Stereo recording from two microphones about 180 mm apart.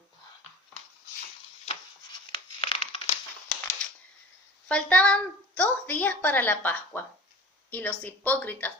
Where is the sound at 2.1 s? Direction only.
30° left (ahead or behind).